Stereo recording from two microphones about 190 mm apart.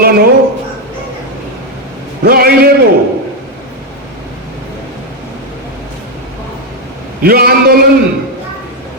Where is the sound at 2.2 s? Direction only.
50° right (ahead or behind).